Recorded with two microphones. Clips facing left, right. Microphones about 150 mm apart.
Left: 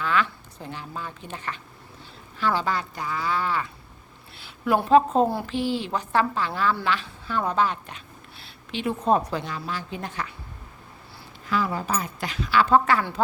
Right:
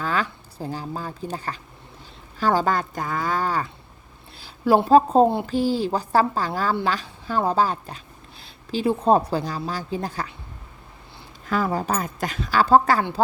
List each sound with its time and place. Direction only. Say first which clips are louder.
0.0 s a woman's voice: even; 40° right (ahead or behind)
11.4 s a woman's voice: right 3 dB; 45° right (ahead or behind)